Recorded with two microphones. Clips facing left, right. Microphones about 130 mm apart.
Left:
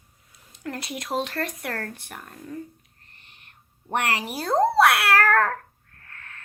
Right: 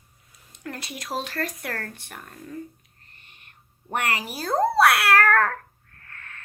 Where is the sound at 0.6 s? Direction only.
30° left (ahead or behind).